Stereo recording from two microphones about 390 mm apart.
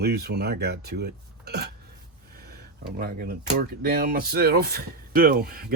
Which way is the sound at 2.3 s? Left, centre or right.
Right.